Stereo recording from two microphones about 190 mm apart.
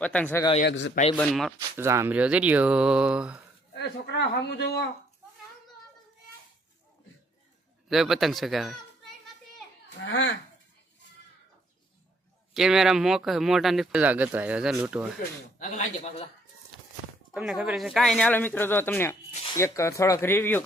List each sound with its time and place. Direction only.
0.0 s speech: 5° left (ahead or behind)
0.7 s speech: 75° left (ahead or behind)
1.1 s speech: 5° left (ahead or behind)
1.8 s speech: 15° right (ahead or behind)
3.8 s speech: 65° left (ahead or behind)
7.9 s a child's voice: centre (ahead or behind)
10.0 s speech: 75° left (ahead or behind)
12.5 s speech: centre (ahead or behind)
15.5 s a man's voice: 40° left (ahead or behind)
17.3 s speech: 5° right (ahead or behind)